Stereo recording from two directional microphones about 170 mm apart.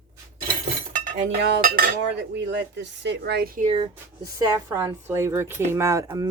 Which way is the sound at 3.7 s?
35° right (ahead or behind).